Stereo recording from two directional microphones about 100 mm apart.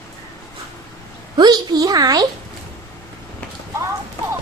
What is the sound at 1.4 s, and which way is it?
Speech, 40° right (ahead or behind).